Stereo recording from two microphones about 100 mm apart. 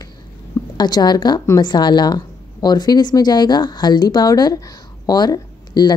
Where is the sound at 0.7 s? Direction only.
45° left (ahead or behind).